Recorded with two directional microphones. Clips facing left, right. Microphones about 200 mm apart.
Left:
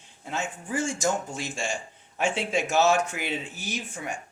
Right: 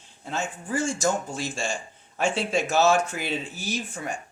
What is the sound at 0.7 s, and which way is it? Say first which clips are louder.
A man's voice: right 2 dB; 20° left (ahead or behind).